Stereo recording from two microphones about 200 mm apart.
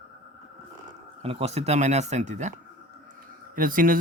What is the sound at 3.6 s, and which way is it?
Speech, 45° right (ahead or behind).